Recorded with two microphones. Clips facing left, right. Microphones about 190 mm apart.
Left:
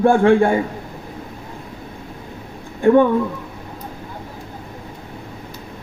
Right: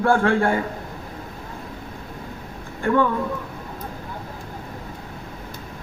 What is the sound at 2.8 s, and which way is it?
Speech, 20° left (ahead or behind).